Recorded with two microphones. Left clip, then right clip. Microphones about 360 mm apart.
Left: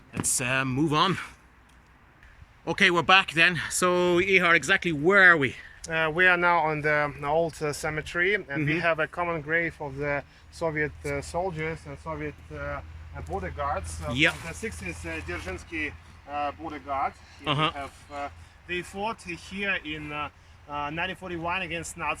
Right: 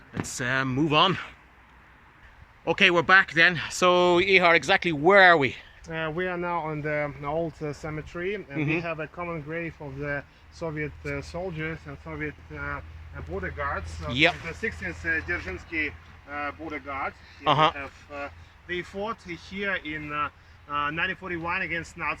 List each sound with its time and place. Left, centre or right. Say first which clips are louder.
0.1 s speech: even; centre
2.6 s speech: right 1 dB; centre
5.8 s speech: left 8 dB; left; by 14.1 s centre
14.1 s speech: right 2 dB; centre
14.6 s speech: right 5 dB; centre
17.4 s speech: right 6 dB; centre
17.7 s speech: left 1 dB; centre